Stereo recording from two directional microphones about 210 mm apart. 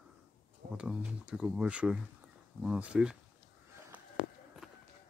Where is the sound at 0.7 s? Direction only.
5° right (ahead or behind).